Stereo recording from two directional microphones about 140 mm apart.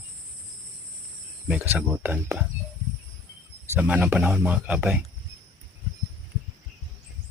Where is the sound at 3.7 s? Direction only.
10° right (ahead or behind).